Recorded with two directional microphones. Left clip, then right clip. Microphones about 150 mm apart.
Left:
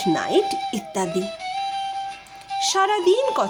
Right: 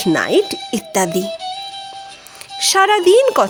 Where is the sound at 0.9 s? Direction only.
55° right (ahead or behind).